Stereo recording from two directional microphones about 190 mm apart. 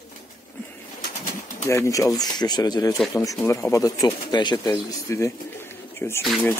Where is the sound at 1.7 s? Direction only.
15° left (ahead or behind).